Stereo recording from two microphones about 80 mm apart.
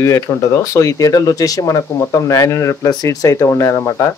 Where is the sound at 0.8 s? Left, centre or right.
Left.